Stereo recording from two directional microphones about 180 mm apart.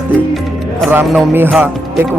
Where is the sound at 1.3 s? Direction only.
10° right (ahead or behind).